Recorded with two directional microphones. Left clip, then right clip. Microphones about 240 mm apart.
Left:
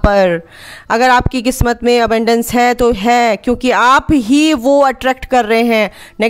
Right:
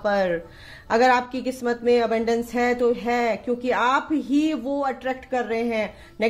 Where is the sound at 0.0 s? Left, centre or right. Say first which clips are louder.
Left 11 dB; left.